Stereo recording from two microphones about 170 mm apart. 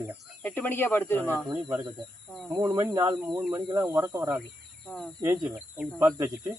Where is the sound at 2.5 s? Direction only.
20° right (ahead or behind).